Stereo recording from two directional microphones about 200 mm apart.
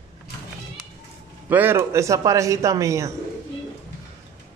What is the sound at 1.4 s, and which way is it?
A man's voice, 10° right (ahead or behind).